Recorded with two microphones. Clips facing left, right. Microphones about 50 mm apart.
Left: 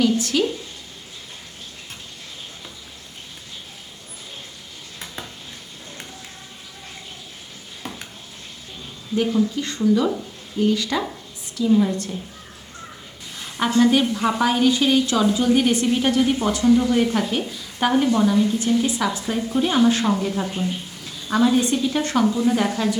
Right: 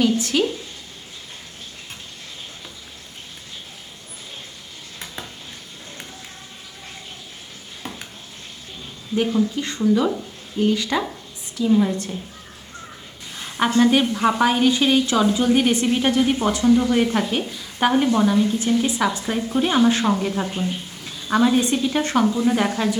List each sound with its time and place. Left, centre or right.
0.0 s a woman's voice: right
9.1 s a woman's voice: centre
13.3 s sizzle: right
14.2 s a woman's voice: right